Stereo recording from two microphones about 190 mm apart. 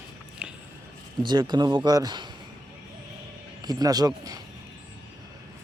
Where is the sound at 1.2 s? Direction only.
20° right (ahead or behind).